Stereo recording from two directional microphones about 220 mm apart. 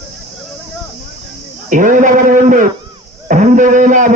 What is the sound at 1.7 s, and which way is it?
A man's voice, 35° right (ahead or behind).